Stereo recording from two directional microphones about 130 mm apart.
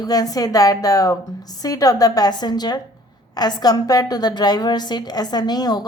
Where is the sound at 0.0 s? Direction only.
30° left (ahead or behind).